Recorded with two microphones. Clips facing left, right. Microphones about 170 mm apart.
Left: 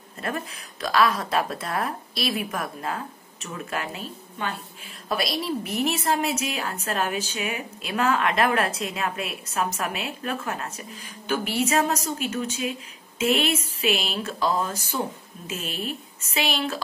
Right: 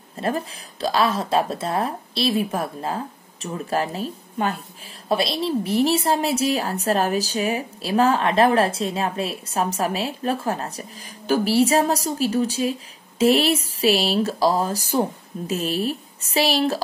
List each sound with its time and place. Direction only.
0.2 s a woman's voice: 30° right (ahead or behind)
5.0 s a woman's voice: 30° right (ahead or behind)